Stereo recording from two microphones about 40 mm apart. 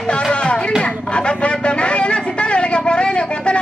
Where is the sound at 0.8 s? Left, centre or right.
Left.